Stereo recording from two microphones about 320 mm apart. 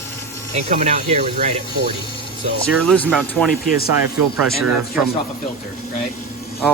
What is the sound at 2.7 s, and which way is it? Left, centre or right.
Speech, centre.